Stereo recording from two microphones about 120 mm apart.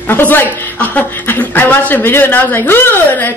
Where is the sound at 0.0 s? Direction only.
15° left (ahead or behind).